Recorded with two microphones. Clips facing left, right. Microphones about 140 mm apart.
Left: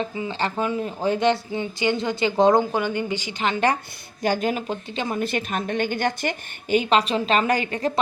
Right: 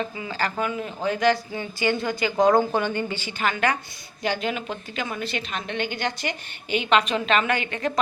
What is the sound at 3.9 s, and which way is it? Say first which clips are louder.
A woman's voice: left 4 dB; 45° left (ahead or behind).